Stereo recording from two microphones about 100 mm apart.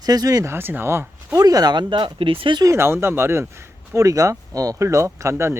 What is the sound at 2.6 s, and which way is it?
Speech, 30° right (ahead or behind).